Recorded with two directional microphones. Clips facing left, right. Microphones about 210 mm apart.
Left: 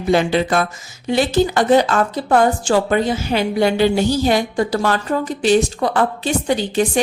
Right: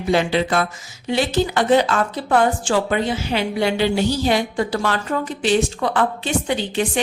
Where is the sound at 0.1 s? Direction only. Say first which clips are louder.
Left 3 dB; 45° left (ahead or behind).